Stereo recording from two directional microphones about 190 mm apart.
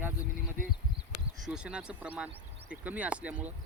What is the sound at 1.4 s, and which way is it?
Speech, 5° right (ahead or behind).